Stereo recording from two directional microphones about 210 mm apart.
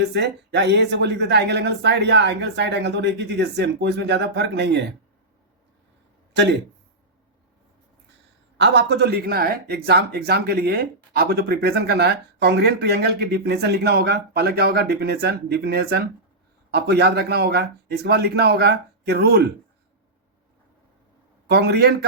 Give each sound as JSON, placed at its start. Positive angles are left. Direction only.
{"t": 0.0, "sound": "speech", "side_deg": -55}
{"t": 6.3, "sound": "speech", "side_deg": -55}
{"t": 8.5, "sound": "speech", "side_deg": -55}
{"t": 21.4, "sound": "speech", "side_deg": -50}